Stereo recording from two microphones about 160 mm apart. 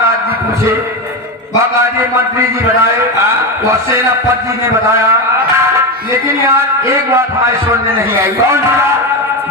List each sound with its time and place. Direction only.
6.5 s a man's voice: 15° right (ahead or behind)